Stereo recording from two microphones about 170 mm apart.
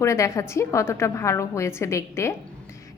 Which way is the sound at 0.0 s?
15° left (ahead or behind).